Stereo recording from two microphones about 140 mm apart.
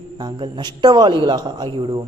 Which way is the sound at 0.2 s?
30° right (ahead or behind).